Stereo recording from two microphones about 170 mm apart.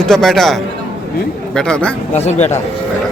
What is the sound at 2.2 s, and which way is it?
Speech, 40° left (ahead or behind).